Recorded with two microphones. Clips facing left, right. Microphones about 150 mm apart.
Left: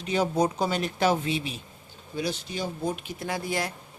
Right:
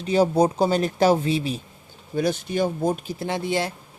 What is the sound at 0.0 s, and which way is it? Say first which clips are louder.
Speech: right 6 dB; 35° right (ahead or behind).